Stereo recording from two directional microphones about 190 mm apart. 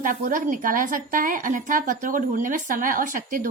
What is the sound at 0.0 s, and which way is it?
A woman's voice, 45° right (ahead or behind).